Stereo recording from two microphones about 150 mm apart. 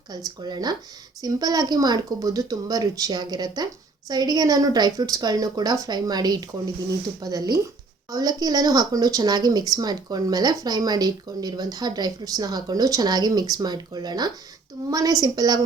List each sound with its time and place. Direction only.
0.4 s speech: 25° right (ahead or behind)